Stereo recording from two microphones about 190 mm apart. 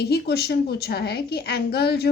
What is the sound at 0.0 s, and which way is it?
A child's voice, 55° left (ahead or behind).